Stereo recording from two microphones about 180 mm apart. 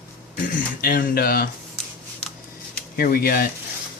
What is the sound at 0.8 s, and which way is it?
Speech, 55° left (ahead or behind).